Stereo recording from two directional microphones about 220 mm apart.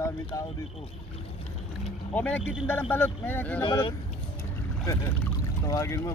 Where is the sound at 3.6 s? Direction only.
20° left (ahead or behind).